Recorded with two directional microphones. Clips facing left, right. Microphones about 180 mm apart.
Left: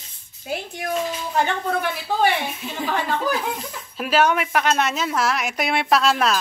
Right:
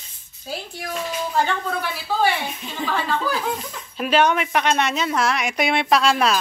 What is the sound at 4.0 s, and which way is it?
A woman's voice, 5° left (ahead or behind).